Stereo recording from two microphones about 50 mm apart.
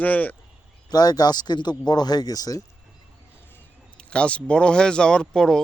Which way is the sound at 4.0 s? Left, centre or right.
Left.